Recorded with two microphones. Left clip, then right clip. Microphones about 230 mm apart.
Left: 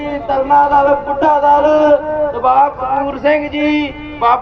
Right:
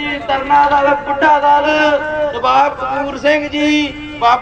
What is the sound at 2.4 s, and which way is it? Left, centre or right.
A man's voice, right.